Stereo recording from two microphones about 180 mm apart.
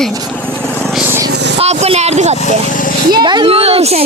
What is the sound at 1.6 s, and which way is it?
Speech, 35° right (ahead or behind).